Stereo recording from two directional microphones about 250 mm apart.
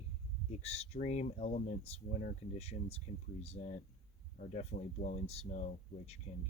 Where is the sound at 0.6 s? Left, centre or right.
Left.